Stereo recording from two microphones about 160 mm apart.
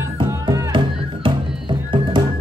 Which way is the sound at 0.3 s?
20° right (ahead or behind).